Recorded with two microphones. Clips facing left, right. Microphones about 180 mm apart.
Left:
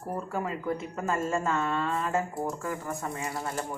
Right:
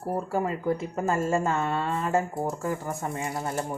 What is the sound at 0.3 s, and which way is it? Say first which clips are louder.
Speech: right 4 dB; 35° right (ahead or behind).